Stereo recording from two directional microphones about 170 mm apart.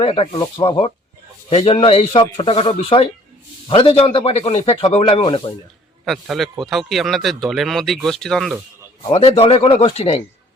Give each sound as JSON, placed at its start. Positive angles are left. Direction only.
{"t": 0.0, "sound": "a man's voice", "side_deg": 35}
{"t": 6.1, "sound": "speech", "side_deg": 0}
{"t": 9.0, "sound": "a man's voice", "side_deg": 35}